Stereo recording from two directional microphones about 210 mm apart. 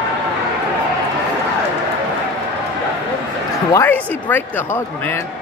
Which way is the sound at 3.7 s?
10° left (ahead or behind).